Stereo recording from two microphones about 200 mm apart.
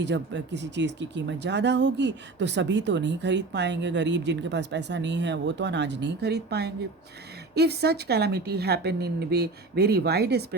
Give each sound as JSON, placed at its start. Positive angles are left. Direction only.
{"t": 0.0, "sound": "speech", "side_deg": -60}